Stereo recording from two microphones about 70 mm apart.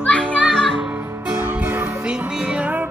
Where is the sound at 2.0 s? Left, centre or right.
Centre.